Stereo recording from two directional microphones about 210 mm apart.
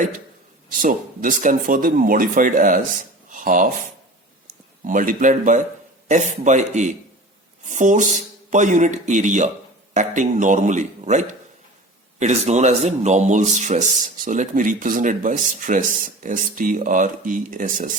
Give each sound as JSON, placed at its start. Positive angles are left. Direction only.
{"t": 0.7, "sound": "speech", "side_deg": -40}
{"t": 4.9, "sound": "speech", "side_deg": -40}